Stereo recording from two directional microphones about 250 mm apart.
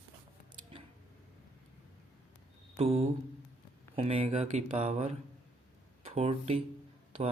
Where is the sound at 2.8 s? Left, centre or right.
Right.